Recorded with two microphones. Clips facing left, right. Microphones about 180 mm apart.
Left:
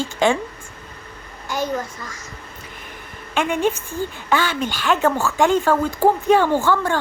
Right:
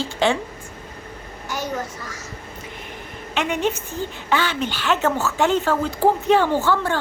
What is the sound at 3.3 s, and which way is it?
A woman's voice, 50° left (ahead or behind).